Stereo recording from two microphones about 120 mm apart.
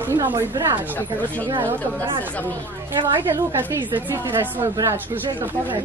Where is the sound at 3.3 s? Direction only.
20° right (ahead or behind).